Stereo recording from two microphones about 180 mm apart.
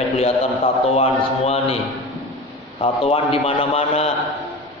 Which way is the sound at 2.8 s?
30° left (ahead or behind).